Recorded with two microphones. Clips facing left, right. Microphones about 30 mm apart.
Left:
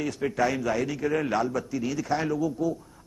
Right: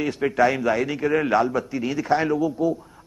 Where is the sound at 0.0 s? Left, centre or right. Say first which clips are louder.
Right 6 dB; right.